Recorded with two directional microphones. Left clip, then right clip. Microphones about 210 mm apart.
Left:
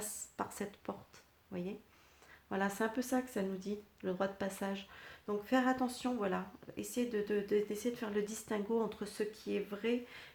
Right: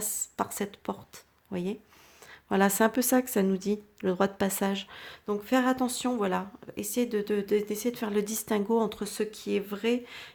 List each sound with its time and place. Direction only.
0.0 s a woman's voice: 35° right (ahead or behind)